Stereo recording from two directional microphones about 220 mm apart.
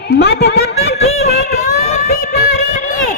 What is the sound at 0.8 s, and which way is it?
Snicker, 30° left (ahead or behind).